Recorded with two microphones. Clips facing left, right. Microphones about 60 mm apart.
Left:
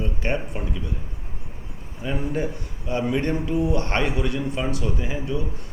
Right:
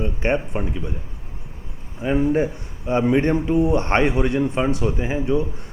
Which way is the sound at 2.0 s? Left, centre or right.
Right.